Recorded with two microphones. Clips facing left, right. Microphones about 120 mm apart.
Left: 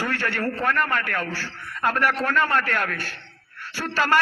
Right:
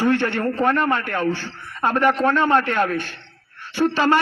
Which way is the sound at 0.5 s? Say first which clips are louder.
Right 5 dB; 40° right (ahead or behind).